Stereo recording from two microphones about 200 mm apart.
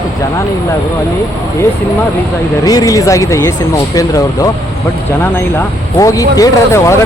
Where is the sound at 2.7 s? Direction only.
20° left (ahead or behind).